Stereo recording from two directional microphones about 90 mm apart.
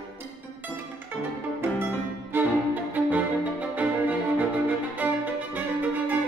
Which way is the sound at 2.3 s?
20° right (ahead or behind).